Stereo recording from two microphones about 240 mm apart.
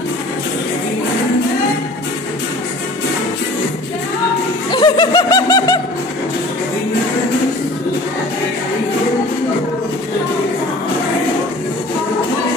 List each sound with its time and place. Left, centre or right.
4.6 s snicker: centre